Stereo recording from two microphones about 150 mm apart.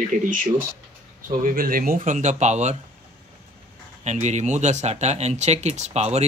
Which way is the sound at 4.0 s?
50° right (ahead or behind).